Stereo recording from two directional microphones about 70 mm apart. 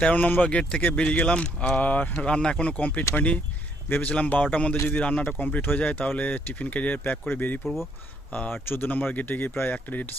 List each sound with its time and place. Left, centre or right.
0.0 s speech: left
3.0 s speech: left
3.8 s speech: left
7.6 s speech: centre
8.3 s speech: left